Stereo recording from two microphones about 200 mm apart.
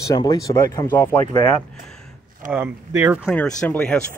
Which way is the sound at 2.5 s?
10° right (ahead or behind).